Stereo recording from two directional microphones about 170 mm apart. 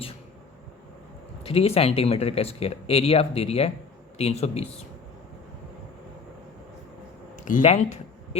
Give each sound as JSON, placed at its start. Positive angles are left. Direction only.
{"t": 1.5, "sound": "speech", "side_deg": 35}
{"t": 7.6, "sound": "a man's voice", "side_deg": 40}